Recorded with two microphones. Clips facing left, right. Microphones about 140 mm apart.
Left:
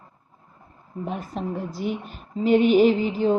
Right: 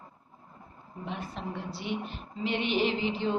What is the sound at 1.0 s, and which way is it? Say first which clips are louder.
A woman's voice: left 7 dB; 45° left (ahead or behind).